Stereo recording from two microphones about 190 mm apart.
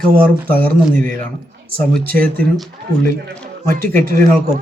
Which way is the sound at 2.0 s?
50° right (ahead or behind).